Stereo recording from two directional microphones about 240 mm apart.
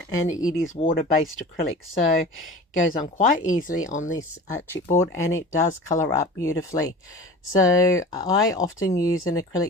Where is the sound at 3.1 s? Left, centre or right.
Left.